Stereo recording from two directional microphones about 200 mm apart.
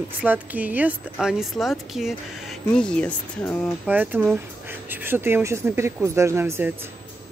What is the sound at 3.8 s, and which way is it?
Speech, 10° right (ahead or behind).